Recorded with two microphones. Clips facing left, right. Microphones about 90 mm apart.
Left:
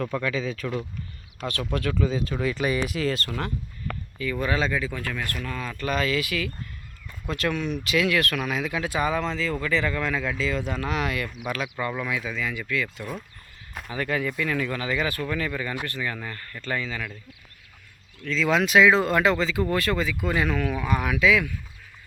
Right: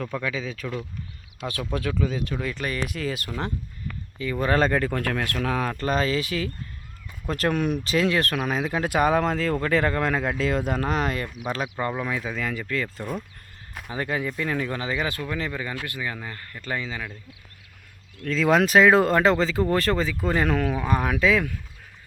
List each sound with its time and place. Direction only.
0.0 s speech: 5° right (ahead or behind)
1.7 s speech: 5° right (ahead or behind)
4.2 s speech: 30° right (ahead or behind)
4.4 s speech: 50° right (ahead or behind); by 5.7 s 70° right (ahead or behind)
5.7 s speech: 35° right (ahead or behind)
8.8 s speech: 60° right (ahead or behind); by 13.1 s 35° right (ahead or behind)
13.9 s speech: 25° right (ahead or behind)
18.2 s speech: 50° right (ahead or behind)